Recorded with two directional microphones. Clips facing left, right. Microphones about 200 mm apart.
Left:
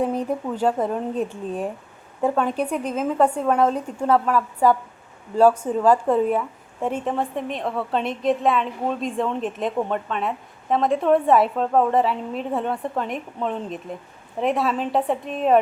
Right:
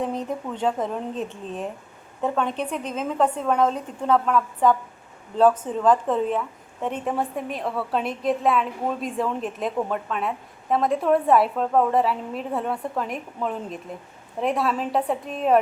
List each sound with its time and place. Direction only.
0.0 s a woman's voice: 5° left (ahead or behind)